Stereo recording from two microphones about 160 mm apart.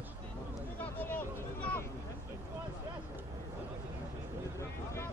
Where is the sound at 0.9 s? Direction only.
10° left (ahead or behind).